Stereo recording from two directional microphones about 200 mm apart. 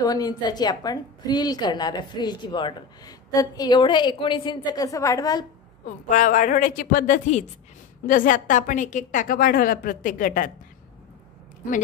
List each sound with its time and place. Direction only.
0.0 s a woman's voice: 20° left (ahead or behind)
6.0 s a woman's voice: 40° left (ahead or behind)